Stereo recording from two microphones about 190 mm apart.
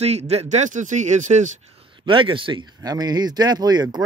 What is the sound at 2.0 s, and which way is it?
Speech, 25° right (ahead or behind).